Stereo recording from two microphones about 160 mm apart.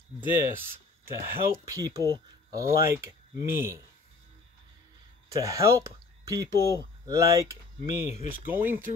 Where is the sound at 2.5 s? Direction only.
20° right (ahead or behind).